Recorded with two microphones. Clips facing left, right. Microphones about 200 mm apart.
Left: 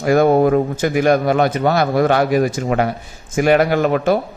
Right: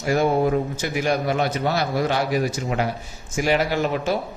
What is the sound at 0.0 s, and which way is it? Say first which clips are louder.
A man's voice: left 7 dB; 55° left (ahead or behind).